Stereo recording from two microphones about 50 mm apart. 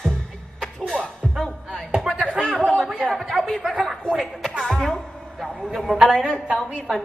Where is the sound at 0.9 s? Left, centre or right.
Centre.